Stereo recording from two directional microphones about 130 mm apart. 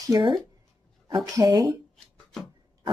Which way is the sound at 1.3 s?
30° right (ahead or behind).